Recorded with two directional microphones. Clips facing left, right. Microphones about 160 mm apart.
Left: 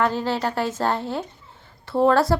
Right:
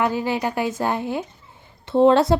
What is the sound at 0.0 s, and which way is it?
A woman's voice, 10° right (ahead or behind).